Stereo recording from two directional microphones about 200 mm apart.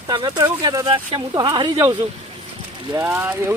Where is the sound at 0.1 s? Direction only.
20° right (ahead or behind).